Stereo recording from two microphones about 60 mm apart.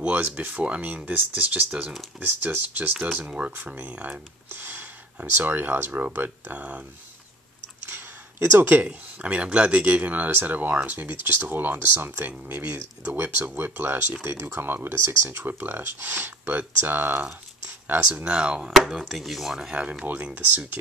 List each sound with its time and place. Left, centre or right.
0.0 s speech: right
2.1 s speech: right
3.3 s speech: centre
3.6 s speech: right
7.8 s a sound: right
9.2 s speech: right
14.2 s speech: right
18.4 s speech: centre
19.7 s speech: right